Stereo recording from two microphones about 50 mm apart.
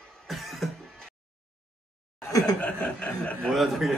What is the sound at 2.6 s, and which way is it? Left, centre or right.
Speech, left.